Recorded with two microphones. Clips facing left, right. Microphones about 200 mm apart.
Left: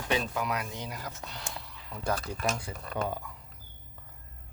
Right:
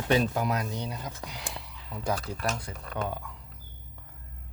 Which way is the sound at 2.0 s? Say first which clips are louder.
Right 1 dB; 5° right (ahead or behind).